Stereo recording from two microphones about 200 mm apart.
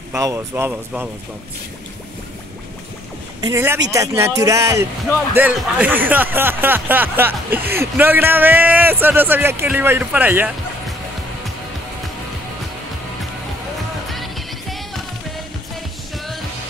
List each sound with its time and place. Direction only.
0.1 s speech: 15° right (ahead or behind)
3.3 s speech: 15° right (ahead or behind)
14.1 s music: centre (ahead or behind)